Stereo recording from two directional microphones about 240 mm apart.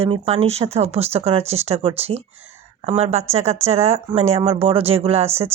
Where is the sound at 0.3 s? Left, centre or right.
Right.